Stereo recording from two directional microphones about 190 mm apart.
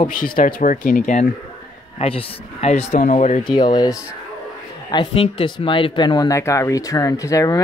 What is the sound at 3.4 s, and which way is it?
Speech, 25° left (ahead or behind).